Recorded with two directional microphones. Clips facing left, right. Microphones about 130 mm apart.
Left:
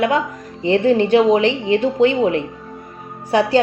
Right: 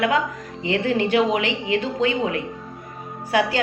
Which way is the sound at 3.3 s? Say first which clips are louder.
Left 4 dB; 25° left (ahead or behind).